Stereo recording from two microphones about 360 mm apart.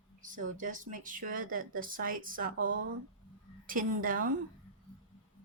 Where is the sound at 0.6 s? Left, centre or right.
Right.